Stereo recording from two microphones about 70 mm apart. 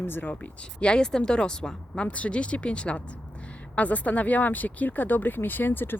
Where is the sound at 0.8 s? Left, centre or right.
Centre.